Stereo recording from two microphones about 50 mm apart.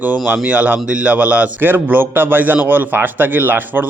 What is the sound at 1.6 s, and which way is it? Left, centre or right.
A man's voice, right.